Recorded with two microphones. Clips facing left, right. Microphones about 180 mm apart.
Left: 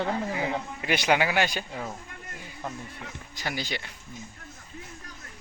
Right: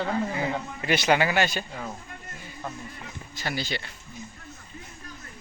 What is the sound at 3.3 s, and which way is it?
Speech, 15° left (ahead or behind).